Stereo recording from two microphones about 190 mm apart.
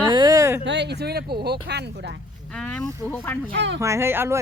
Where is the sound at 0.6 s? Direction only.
65° right (ahead or behind).